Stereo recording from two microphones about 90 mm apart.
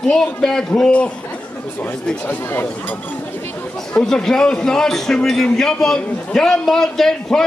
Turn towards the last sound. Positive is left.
turn(degrees=5)  # may be behind; listen again after turning